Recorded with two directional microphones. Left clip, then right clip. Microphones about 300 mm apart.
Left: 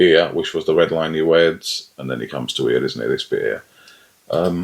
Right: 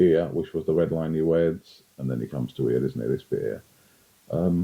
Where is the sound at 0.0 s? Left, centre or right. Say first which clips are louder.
Left 8 dB; centre.